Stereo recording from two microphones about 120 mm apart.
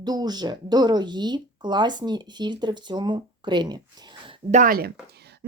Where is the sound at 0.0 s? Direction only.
35° right (ahead or behind).